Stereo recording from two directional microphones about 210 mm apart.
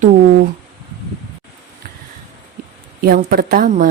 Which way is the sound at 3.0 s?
45° right (ahead or behind).